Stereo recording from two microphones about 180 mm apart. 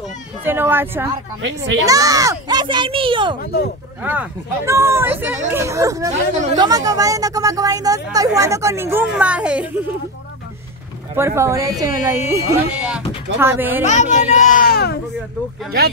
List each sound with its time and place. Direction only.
0.4 s speech: 10° right (ahead or behind)
1.4 s speech: 80° right
1.9 s speech: 20° right (ahead or behind)
4.0 s speech: 10° right (ahead or behind)
11.1 s speech: 15° right (ahead or behind)
13.8 s a child's voice: 40° left (ahead or behind); by 15.0 s 60° left (ahead or behind)